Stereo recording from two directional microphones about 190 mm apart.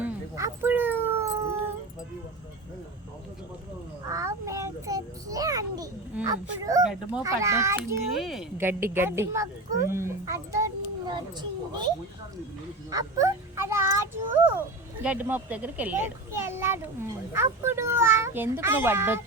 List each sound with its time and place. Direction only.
0.0 s dog: 15° right (ahead or behind)
4.0 s child singing: 15° right (ahead or behind)
6.2 s honk: 20° right (ahead or behind)
6.8 s a child's voice: 10° right (ahead or behind)
8.1 s speech: centre (ahead or behind)
8.5 s a sound: 10° right (ahead or behind)
12.9 s a sound: 20° right (ahead or behind)
15.0 s a child's voice: 10° right (ahead or behind)